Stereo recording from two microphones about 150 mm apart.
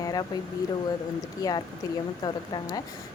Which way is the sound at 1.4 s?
25° left (ahead or behind).